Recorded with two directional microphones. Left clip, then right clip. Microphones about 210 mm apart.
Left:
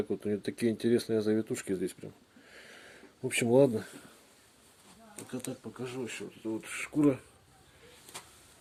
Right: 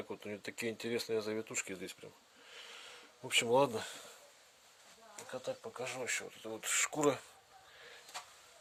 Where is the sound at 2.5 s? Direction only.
15° right (ahead or behind).